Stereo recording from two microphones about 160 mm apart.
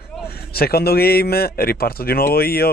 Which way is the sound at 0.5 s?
75° left (ahead or behind).